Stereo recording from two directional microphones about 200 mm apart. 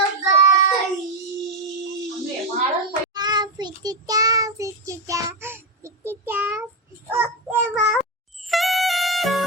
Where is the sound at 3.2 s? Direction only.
20° right (ahead or behind).